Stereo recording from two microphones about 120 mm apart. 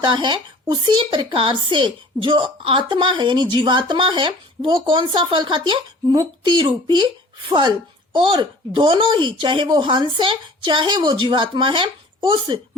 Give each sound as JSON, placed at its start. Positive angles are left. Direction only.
{"t": 0.0, "sound": "speech", "side_deg": -40}
{"t": 8.1, "sound": "speech", "side_deg": -45}